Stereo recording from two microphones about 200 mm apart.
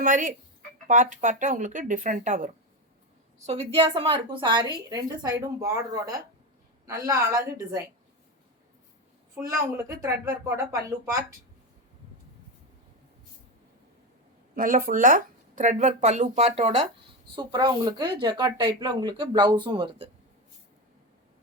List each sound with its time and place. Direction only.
0.0 s a woman's voice: 40° right (ahead or behind); by 7.5 s 15° right (ahead or behind)
9.4 s speech: 10° right (ahead or behind)
14.5 s speech: 40° right (ahead or behind)
17.3 s a woman's voice: 20° right (ahead or behind)